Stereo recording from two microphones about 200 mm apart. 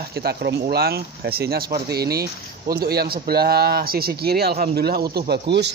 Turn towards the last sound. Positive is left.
turn(degrees=-60)  # may be behind; listen again after turning